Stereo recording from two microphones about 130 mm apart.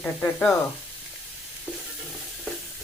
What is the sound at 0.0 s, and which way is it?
Sizzle, 15° left (ahead or behind).